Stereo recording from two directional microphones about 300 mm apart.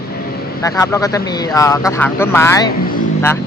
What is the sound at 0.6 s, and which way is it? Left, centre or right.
Speech, centre.